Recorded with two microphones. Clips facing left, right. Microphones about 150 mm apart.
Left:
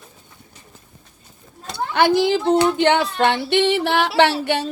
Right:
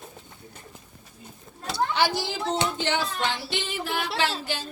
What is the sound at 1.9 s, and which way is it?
Female singing, 55° left (ahead or behind).